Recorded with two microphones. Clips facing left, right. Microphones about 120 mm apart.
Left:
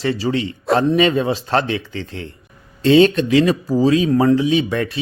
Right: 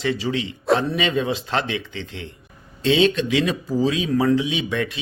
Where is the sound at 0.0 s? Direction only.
40° left (ahead or behind).